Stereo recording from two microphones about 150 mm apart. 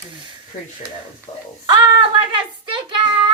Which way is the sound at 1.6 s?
30° right (ahead or behind).